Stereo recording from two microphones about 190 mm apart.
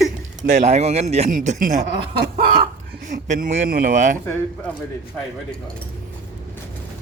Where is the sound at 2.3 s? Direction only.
30° right (ahead or behind).